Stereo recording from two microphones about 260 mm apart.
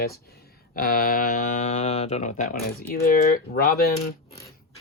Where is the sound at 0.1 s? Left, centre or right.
Left.